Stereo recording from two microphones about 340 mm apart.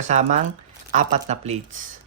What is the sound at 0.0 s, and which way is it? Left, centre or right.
Speech, right.